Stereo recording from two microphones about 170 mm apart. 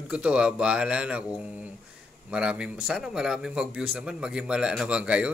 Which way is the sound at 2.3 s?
5° right (ahead or behind).